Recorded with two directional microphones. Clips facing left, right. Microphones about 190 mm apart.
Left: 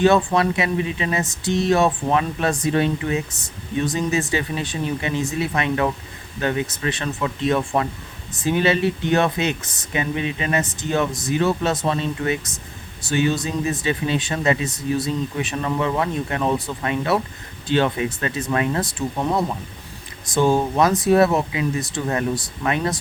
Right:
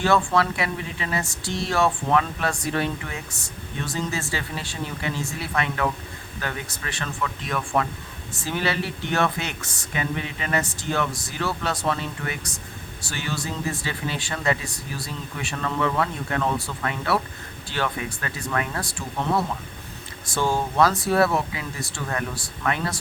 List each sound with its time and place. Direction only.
0.0 s speech: 20° left (ahead or behind)